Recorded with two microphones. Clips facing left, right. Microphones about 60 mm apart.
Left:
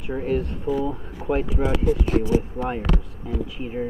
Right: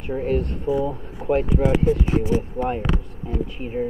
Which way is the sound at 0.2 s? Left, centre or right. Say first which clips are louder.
Right 1 dB; centre.